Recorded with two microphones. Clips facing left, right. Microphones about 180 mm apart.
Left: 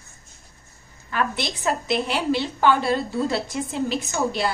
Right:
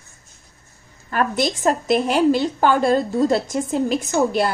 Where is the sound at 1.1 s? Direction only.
45° right (ahead or behind).